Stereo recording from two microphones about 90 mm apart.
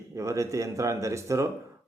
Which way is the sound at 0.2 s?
35° right (ahead or behind).